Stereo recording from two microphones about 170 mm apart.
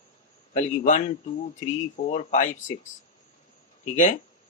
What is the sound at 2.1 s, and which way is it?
Speech, 45° left (ahead or behind).